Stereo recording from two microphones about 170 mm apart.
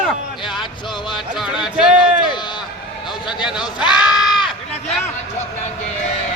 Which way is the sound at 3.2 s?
25° left (ahead or behind).